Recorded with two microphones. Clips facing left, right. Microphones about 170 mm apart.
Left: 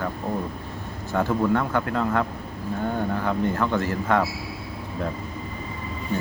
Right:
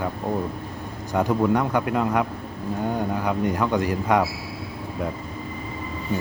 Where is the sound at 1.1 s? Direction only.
15° right (ahead or behind).